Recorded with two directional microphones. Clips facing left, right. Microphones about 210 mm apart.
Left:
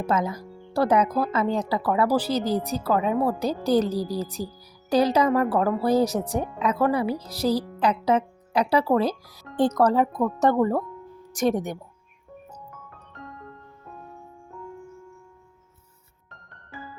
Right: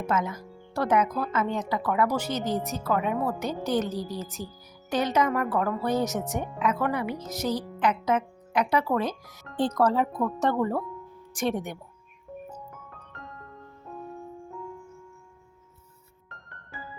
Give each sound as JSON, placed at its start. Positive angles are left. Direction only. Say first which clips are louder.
{"t": 0.0, "sound": "speech", "louder": "left 3 dB", "side_deg": 35}